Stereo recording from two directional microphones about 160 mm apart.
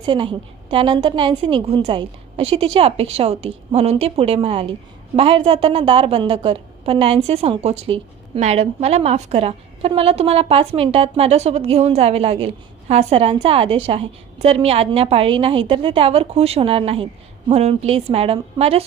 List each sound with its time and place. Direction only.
0.0 s a woman's voice: 30° right (ahead or behind)